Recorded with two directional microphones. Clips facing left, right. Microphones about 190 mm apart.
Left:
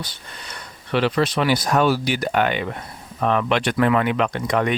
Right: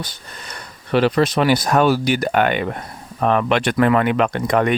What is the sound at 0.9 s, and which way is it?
Speech, 45° right (ahead or behind).